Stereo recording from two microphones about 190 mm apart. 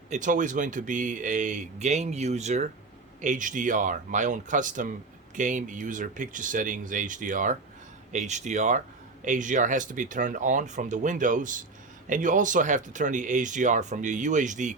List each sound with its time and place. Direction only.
0.1 s speech: 40° right (ahead or behind)